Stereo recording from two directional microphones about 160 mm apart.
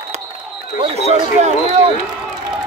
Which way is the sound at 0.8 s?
45° right (ahead or behind).